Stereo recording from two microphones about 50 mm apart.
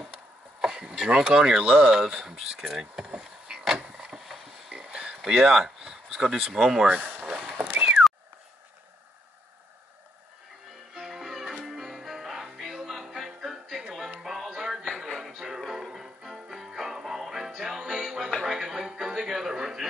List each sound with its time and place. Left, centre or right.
0.7 s vehicle: right
0.9 s speech: centre
1.6 s speech: right
1.9 s speech: centre
3.1 s vehicle: centre
4.0 s a sound: centre
4.9 s speech: centre
6.9 s speech: right
7.7 s a sound: right
11.0 s music: centre
15.3 s music: centre